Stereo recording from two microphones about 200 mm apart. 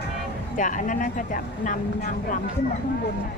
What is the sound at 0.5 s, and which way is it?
Speech, 40° left (ahead or behind).